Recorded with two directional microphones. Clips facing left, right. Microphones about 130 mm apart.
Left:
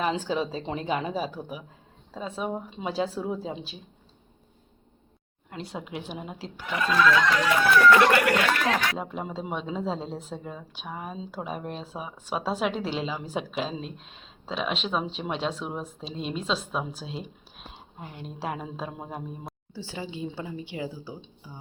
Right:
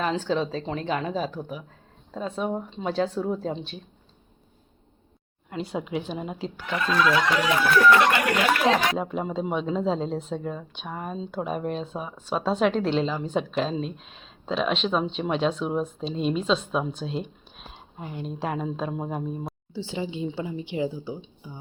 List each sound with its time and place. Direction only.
0.0 s speech: 10° left (ahead or behind)
5.5 s speech: centre (ahead or behind)
7.0 s a woman's voice: 20° right (ahead or behind)
9.0 s speech: centre (ahead or behind)
19.7 s a woman's voice: 20° right (ahead or behind)